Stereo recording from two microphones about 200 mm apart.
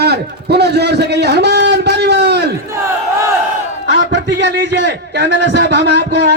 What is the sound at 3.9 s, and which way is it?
A man's voice, 60° right (ahead or behind).